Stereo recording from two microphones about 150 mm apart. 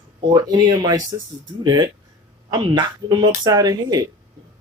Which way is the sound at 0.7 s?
25° right (ahead or behind).